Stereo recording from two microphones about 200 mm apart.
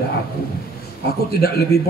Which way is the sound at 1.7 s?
50° left (ahead or behind).